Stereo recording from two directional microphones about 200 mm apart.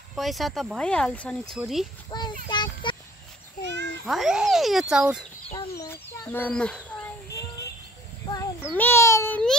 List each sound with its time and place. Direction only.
0.1 s speech: centre (ahead or behind)
2.0 s child singing: 20° left (ahead or behind)
2.5 s a sound: 25° left (ahead or behind)
4.0 s speech: centre (ahead or behind)
5.5 s bird: 15° left (ahead or behind)
7.3 s a sound: 15° left (ahead or behind)